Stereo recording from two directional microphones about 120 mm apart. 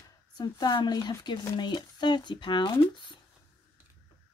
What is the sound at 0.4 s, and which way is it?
Speech, 35° left (ahead or behind).